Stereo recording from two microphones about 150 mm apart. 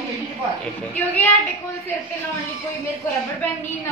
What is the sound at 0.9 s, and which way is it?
Speech, 10° left (ahead or behind).